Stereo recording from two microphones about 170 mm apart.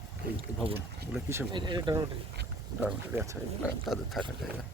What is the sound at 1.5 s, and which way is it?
Speech, 25° right (ahead or behind).